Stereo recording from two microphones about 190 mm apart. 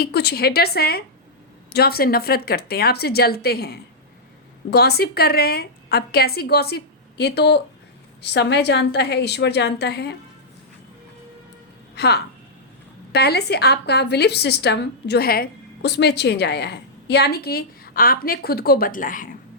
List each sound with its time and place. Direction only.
0.0 s a woman's voice: 60° left (ahead or behind)
11.9 s a woman's voice: 60° left (ahead or behind)